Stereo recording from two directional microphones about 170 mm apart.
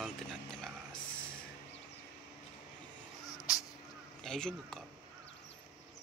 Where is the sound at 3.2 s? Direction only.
20° left (ahead or behind).